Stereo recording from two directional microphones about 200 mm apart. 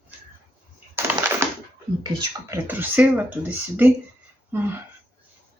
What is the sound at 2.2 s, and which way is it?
Speech, 10° right (ahead or behind).